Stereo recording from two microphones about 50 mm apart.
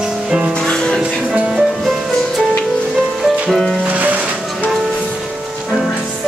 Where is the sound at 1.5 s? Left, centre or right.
Centre.